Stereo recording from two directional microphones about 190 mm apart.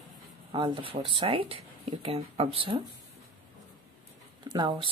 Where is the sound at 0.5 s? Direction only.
25° right (ahead or behind).